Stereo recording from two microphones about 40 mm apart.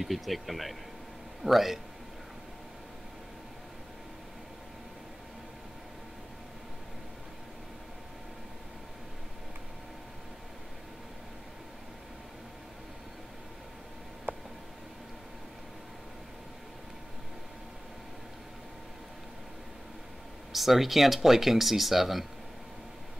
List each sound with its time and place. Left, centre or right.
0.0 s speech: centre
14.3 s a sound: right
20.5 s speech: centre